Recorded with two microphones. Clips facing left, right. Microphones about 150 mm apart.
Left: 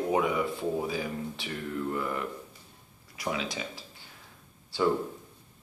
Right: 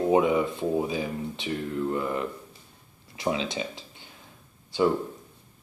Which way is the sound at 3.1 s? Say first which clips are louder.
Right 5 dB; 25° right (ahead or behind).